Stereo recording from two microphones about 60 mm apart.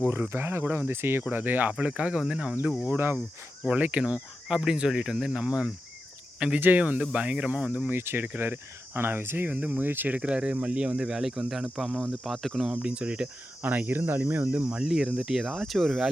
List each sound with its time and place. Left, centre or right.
0.1 s speech: right; by 2.6 s centre
2.9 s speech: right
3.7 s speech: right
6.6 s speech: right
7.9 s speech: right
10.2 s speech: centre
12.1 s speech: centre
12.7 s speech: centre
13.6 s speech: right
14.4 s speech: centre